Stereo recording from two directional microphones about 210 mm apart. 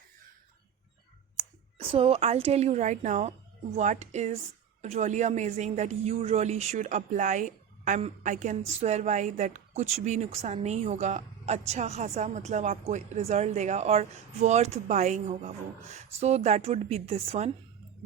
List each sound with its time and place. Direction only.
1.9 s a woman's voice: 25° right (ahead or behind)